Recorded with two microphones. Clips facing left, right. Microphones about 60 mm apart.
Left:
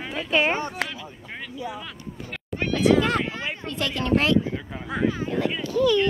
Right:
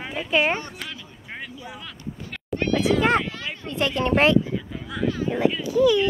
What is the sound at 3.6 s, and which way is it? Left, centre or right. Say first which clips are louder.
Speech: right 4 dB; right.